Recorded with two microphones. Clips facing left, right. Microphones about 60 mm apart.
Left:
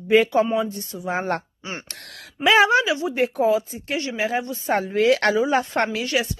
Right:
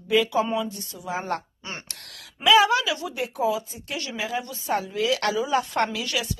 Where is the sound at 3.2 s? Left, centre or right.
Left.